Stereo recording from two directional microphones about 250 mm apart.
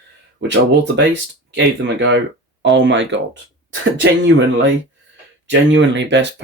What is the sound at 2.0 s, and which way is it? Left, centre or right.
Speech, right.